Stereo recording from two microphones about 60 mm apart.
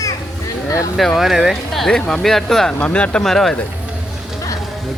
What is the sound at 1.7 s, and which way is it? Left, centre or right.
Speech, centre.